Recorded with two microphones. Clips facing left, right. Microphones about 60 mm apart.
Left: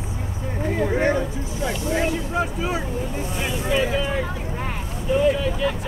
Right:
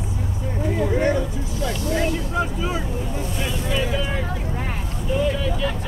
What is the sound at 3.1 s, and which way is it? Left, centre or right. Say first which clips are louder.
Boat: even; left.